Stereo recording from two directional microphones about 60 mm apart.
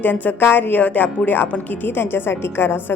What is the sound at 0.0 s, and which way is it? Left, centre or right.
A woman's voice, left.